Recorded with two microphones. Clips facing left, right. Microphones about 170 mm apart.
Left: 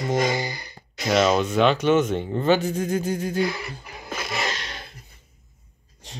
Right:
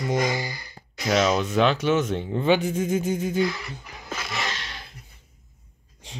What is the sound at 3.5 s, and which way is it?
Speech, 55° left (ahead or behind).